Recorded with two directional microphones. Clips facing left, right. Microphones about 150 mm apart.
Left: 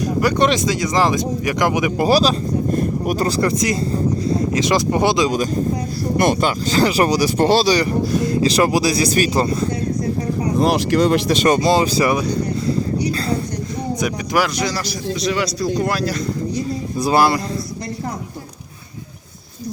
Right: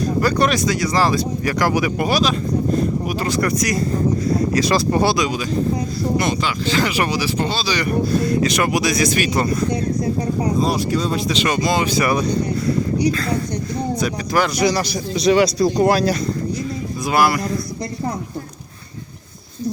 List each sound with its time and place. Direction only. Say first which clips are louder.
0.2 s speech: left 2 dB; 20° left (ahead or behind)
2.0 s speech: left 6 dB; 35° left (ahead or behind)
2.7 s a sound: left 1 dB; 50° left (ahead or behind)
3.2 s speech: right 1 dB; 30° left (ahead or behind)
6.1 s speech: left 6 dB; 50° left (ahead or behind)
8.1 s speech: left 2 dB; 20° left (ahead or behind)
10.6 s speech: left 4 dB; 80° left
11.4 s speech: left 4 dB; 35° left (ahead or behind)
13.9 s speech: left 1 dB; 15° left (ahead or behind)
14.5 s a man's voice: right 4 dB; 15° right (ahead or behind)
17.0 s speech: left 2 dB; 30° left (ahead or behind)